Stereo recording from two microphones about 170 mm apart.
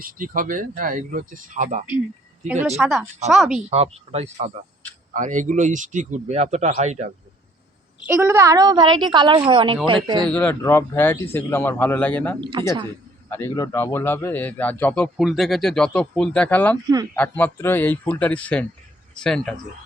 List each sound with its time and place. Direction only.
0.0 s speech: 55° right (ahead or behind)
2.7 s speech: centre (ahead or behind)
4.1 s speech: 40° right (ahead or behind)
8.0 s a woman's voice: 15° right (ahead or behind)
10.2 s speech: 10° left (ahead or behind)
12.4 s a woman's voice: 30° right (ahead or behind)
13.3 s speech: 15° left (ahead or behind)